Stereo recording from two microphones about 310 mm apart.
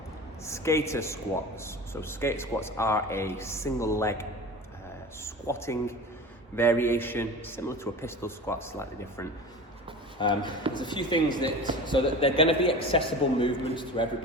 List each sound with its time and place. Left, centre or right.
0.4 s speech: centre
5.2 s a sound: centre
6.6 s speech: centre
11.4 s speech: centre
11.9 s speech: centre